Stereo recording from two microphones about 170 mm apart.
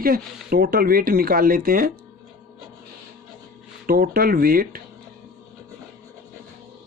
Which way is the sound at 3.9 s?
60° right (ahead or behind).